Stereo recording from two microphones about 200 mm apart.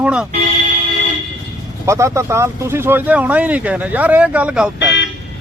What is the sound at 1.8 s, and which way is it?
Speech, 15° right (ahead or behind).